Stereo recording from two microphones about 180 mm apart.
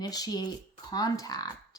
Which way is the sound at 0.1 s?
20° left (ahead or behind).